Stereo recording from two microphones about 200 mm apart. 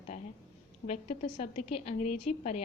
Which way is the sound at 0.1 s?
35° left (ahead or behind).